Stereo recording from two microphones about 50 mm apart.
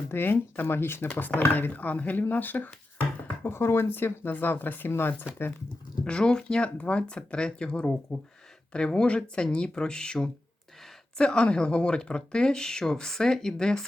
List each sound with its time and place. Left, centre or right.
0.1 s speech: left
1.4 s speech: left
3.4 s speech: left
6.1 s speech: centre